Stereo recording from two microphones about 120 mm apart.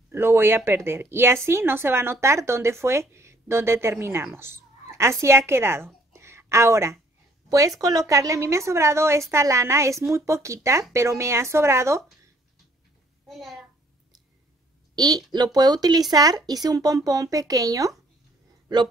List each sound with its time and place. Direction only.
0.1 s a woman's voice: 20° right (ahead or behind)
6.1 s a sound: 20° right (ahead or behind)
7.4 s a woman's voice: 30° right (ahead or behind)
13.3 s a child's voice: centre (ahead or behind)
15.0 s speech: 35° right (ahead or behind)